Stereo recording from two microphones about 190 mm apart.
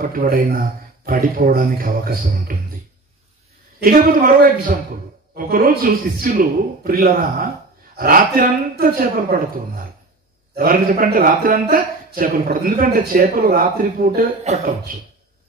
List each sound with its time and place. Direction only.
0.0 s speech: 50° right (ahead or behind)
3.8 s speech: 50° right (ahead or behind)